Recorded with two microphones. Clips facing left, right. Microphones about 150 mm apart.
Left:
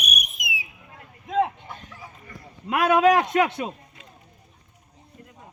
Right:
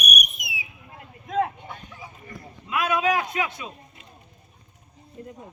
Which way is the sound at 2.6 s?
70° left (ahead or behind).